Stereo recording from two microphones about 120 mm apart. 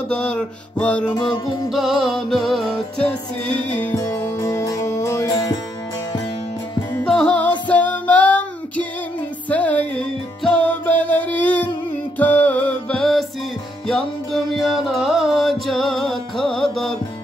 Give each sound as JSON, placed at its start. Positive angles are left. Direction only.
{"t": 0.1, "sound": "music", "side_deg": 5}
{"t": 3.1, "sound": "music", "side_deg": 10}
{"t": 3.9, "sound": "music", "side_deg": 20}
{"t": 7.1, "sound": "music", "side_deg": 5}